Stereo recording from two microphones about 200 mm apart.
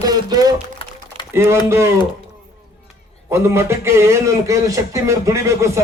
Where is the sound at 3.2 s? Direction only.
15° right (ahead or behind).